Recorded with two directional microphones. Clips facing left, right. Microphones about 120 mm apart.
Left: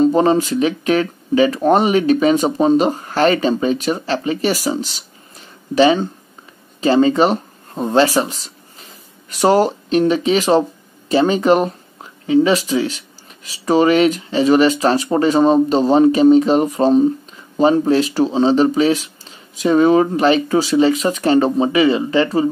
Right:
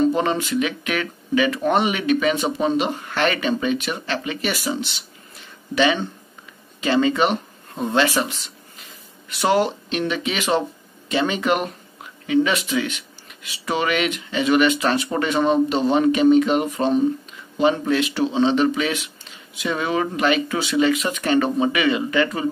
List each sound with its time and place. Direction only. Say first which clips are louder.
0.0 s speech: left 6 dB; 35° left (ahead or behind)